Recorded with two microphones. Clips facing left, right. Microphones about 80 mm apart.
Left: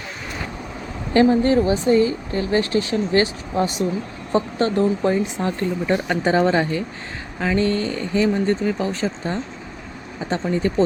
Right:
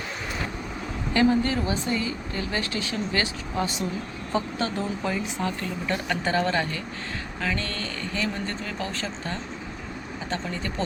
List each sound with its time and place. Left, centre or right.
1.1 s speech: left